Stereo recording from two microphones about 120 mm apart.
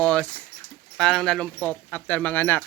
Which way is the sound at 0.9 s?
5° left (ahead or behind).